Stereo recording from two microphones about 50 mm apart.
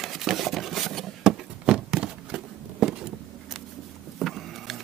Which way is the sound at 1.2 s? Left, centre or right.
Centre.